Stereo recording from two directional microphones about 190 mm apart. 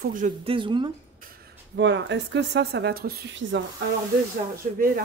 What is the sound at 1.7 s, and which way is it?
Speech, 70° right (ahead or behind).